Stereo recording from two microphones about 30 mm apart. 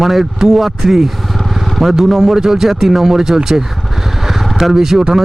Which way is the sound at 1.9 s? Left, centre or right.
Centre.